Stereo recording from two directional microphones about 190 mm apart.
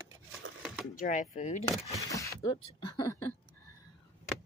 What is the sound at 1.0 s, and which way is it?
Speech, 40° left (ahead or behind).